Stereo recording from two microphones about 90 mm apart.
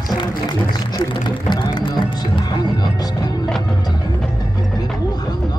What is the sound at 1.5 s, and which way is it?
Music, 55° left (ahead or behind).